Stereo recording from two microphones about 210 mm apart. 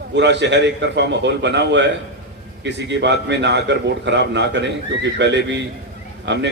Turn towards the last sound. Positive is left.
turn(degrees=-55)  # may be behind; listen again after turning